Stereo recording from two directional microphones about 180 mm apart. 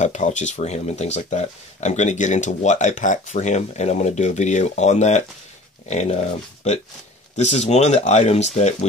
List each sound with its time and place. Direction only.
0.0 s speech: 40° left (ahead or behind)